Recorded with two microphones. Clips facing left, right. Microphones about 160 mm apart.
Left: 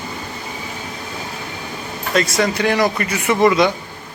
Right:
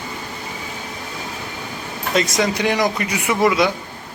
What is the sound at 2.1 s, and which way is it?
Speech, 20° right (ahead or behind).